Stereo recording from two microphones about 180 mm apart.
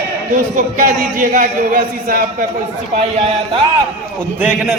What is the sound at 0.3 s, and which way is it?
A man's voice, 50° right (ahead or behind).